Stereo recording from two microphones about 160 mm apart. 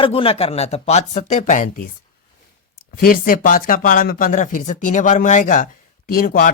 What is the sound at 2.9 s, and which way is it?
Speech, 65° left (ahead or behind).